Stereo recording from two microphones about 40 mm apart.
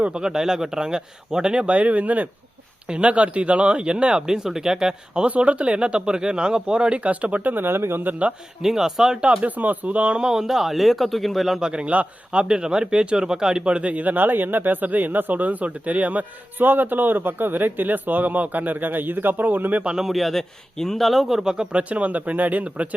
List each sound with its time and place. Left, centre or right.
0.1 s speech: centre
1.7 s speech: right
4.3 s speech: centre
5.2 s speech: right
7.5 s speech: right
8.6 s speech: centre
9.2 s speech: right
9.6 s speech: right
10.2 s speech: centre
11.6 s speech: right
13.9 s a man's voice: right
16.6 s a man's voice: right
20.0 s speech: centre
21.8 s speech: right